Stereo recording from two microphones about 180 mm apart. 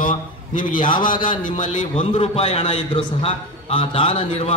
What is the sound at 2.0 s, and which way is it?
A man's voice, 35° left (ahead or behind).